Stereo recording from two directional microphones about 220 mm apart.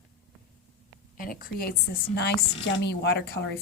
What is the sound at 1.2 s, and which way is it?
A woman's voice, 40° left (ahead or behind).